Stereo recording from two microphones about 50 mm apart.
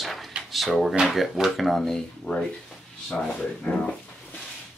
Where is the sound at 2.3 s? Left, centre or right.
Centre.